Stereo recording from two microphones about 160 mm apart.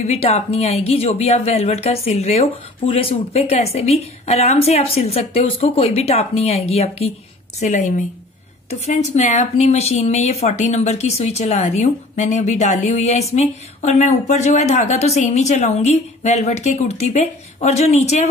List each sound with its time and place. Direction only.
0.0 s a woman's voice: 40° left (ahead or behind)